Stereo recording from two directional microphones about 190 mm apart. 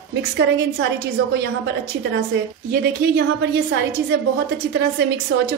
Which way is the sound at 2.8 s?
65° right (ahead or behind).